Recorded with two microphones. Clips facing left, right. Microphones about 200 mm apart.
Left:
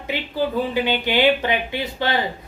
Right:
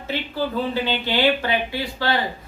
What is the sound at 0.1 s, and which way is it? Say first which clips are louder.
Speech: left 2 dB; 15° left (ahead or behind).